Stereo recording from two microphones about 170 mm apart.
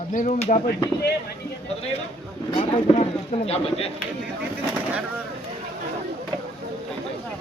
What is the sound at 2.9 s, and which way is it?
Speech, 35° left (ahead or behind).